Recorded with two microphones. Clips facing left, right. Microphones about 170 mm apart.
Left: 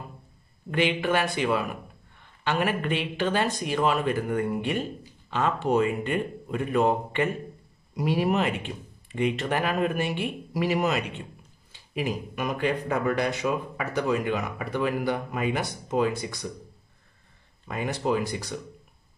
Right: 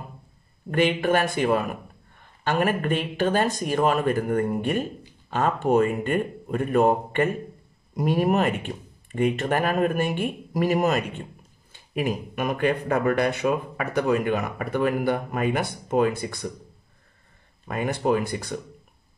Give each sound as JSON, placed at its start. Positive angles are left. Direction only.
{"t": 0.7, "sound": "speech", "side_deg": -45}
{"t": 17.6, "sound": "speech", "side_deg": -55}